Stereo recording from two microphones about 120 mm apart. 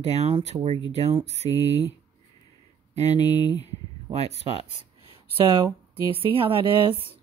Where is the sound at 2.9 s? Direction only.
70° right (ahead or behind).